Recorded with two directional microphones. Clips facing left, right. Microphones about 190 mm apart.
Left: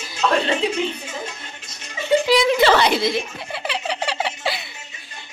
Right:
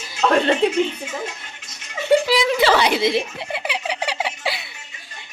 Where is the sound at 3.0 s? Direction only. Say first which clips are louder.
Right 2 dB; 25° right (ahead or behind).